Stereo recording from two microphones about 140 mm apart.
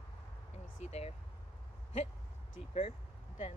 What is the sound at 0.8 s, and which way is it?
Speech, 50° left (ahead or behind).